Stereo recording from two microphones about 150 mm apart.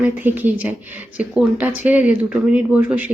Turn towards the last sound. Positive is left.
turn(degrees=-10)  # may be behind; listen again after turning